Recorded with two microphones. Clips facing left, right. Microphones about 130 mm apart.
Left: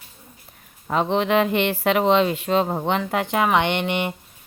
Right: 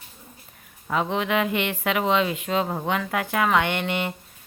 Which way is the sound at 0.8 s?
30° left (ahead or behind).